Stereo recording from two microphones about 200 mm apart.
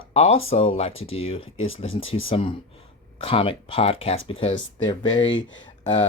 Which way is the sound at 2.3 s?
30° left (ahead or behind).